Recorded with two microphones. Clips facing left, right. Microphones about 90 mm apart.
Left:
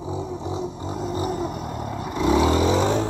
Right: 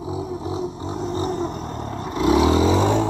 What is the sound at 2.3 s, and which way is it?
Vehicle, 15° right (ahead or behind).